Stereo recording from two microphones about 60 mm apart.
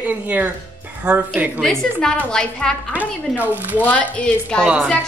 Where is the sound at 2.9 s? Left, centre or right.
Right.